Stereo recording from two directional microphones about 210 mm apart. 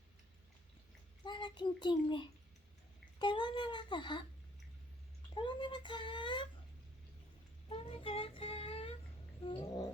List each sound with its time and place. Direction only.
1.2 s a child's voice: 20° left (ahead or behind)
5.3 s speech: 20° left (ahead or behind)
7.7 s child singing: 25° left (ahead or behind)
9.4 s speech: 25° left (ahead or behind)